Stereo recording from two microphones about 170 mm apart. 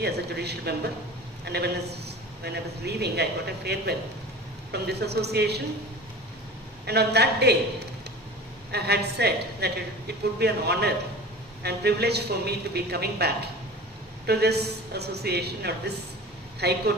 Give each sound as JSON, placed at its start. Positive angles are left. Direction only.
{"t": 0.0, "sound": "a woman's voice", "side_deg": -75}
{"t": 6.9, "sound": "a woman's voice", "side_deg": -75}